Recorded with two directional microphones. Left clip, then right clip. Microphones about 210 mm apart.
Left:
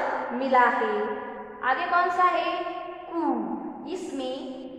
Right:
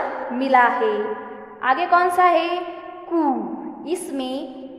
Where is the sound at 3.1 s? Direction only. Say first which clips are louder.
Right 8 dB; 55° right (ahead or behind).